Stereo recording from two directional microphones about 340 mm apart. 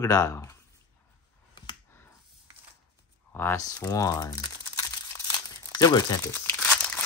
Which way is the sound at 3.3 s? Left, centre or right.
Centre.